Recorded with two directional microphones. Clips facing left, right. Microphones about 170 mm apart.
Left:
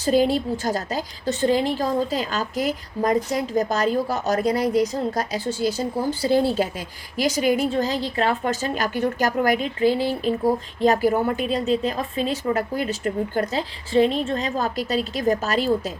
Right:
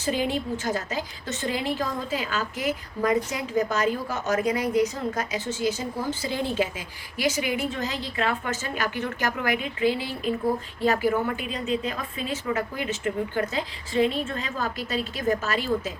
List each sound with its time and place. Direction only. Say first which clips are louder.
0.0 s a woman's voice: left 7 dB; 35° left (ahead or behind)